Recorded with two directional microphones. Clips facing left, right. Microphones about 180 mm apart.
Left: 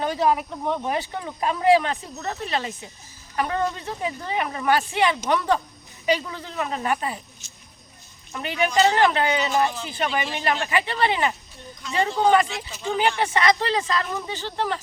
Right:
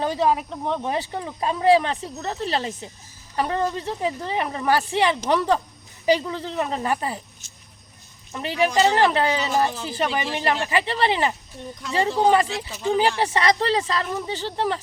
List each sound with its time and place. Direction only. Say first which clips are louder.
0.0 s speech: even; 30° right (ahead or behind)
8.3 s speech: right 2 dB; 30° right (ahead or behind)